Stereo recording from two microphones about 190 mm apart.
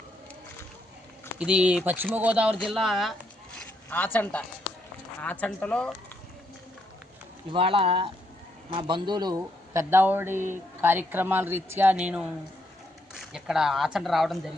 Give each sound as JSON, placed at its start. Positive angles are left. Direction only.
{"t": 1.4, "sound": "speech", "side_deg": -5}
{"t": 7.5, "sound": "speech", "side_deg": -30}
{"t": 13.3, "sound": "speech", "side_deg": -5}